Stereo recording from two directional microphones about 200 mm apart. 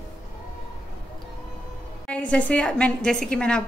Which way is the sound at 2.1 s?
5° left (ahead or behind).